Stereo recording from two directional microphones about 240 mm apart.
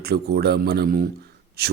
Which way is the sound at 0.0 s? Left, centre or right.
Right.